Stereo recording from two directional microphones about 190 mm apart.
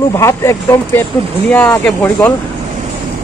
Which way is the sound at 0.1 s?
15° left (ahead or behind).